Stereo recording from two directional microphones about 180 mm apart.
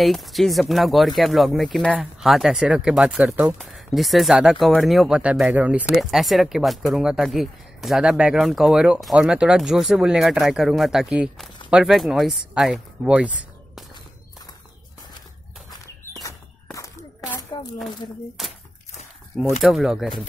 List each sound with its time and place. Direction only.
0.0 s speech: centre (ahead or behind)
16.7 s a sound: 15° left (ahead or behind)
18.4 s speech: centre (ahead or behind)
19.6 s speech: centre (ahead or behind)